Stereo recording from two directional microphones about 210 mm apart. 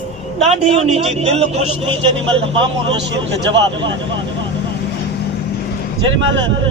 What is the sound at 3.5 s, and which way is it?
Speech, 60° right (ahead or behind).